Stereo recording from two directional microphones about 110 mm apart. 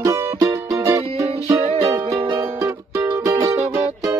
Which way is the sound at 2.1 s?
45° right (ahead or behind).